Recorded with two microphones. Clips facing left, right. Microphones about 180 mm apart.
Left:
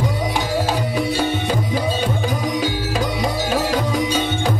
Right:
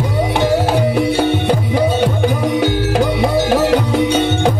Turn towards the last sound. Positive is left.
turn(degrees=-65)  # may be behind; listen again after turning